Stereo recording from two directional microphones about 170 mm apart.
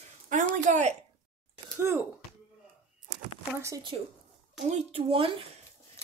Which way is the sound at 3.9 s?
35° right (ahead or behind).